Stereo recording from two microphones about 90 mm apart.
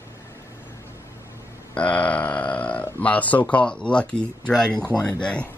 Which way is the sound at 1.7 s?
15° left (ahead or behind).